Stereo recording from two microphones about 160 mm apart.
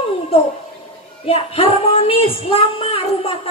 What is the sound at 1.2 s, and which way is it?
Child singing, 40° left (ahead or behind).